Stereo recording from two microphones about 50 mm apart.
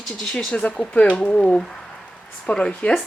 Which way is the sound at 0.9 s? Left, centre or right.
Left.